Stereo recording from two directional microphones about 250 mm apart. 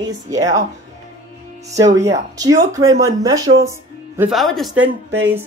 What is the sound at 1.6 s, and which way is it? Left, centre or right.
Speech, centre.